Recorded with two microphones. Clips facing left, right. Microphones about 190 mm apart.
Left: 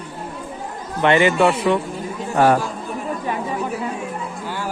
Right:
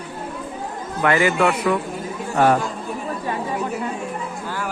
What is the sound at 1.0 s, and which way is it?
Speech, 25° left (ahead or behind).